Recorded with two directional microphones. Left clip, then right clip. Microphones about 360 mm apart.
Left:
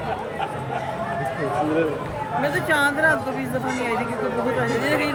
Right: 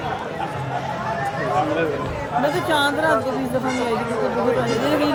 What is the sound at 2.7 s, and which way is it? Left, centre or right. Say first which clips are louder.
Speech: left 2 dB; centre.